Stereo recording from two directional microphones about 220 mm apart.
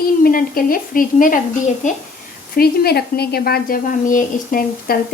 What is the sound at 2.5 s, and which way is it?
A woman's voice, 45° left (ahead or behind).